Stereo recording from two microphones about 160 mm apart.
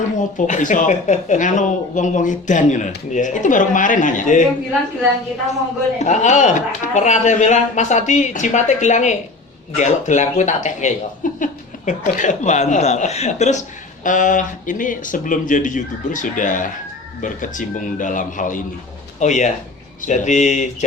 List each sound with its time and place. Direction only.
0.2 s speech: 50° left (ahead or behind)
6.0 s speech: 50° left (ahead or behind)